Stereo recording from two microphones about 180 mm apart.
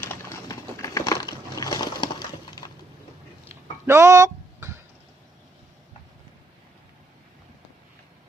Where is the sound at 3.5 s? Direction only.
15° right (ahead or behind).